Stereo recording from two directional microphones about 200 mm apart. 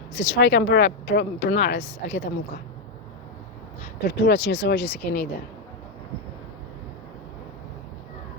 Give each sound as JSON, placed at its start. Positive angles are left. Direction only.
{"t": 0.2, "sound": "speech", "side_deg": 65}
{"t": 4.0, "sound": "speech", "side_deg": 60}